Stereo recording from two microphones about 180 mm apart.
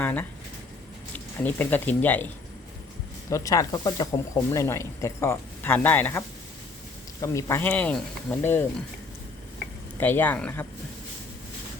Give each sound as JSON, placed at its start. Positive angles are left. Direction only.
{"t": 0.0, "sound": "speech", "side_deg": 10}
{"t": 10.0, "sound": "speech", "side_deg": 10}